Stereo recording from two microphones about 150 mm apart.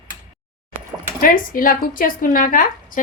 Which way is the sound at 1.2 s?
70° left (ahead or behind).